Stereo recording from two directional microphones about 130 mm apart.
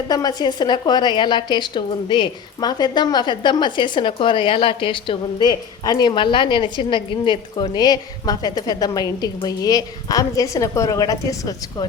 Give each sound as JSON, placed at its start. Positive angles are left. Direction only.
{"t": 0.1, "sound": "a woman's voice", "side_deg": 30}